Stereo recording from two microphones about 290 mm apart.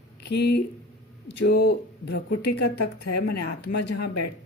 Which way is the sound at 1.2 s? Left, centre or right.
Left.